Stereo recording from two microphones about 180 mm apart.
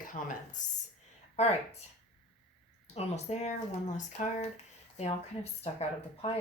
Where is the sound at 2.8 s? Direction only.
35° left (ahead or behind).